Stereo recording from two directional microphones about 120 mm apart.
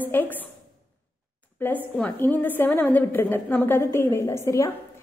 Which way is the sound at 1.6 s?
15° left (ahead or behind).